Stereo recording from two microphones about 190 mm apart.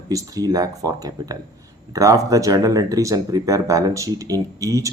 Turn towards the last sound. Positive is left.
turn(degrees=-20)  # may be behind; listen again after turning